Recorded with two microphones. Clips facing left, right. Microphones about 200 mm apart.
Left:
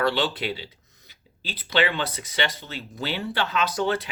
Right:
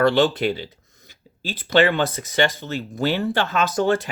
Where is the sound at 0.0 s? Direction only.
50° right (ahead or behind).